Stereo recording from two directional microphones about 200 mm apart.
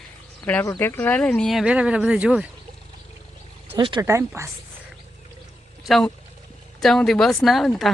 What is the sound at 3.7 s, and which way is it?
Speech, 25° right (ahead or behind).